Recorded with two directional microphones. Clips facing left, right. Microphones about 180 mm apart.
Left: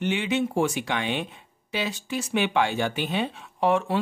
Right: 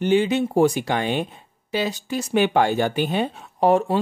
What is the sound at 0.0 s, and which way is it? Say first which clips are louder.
Speech: right 6 dB; 35° right (ahead or behind).